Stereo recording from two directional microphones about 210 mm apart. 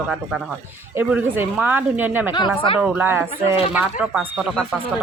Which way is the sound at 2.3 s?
20° left (ahead or behind).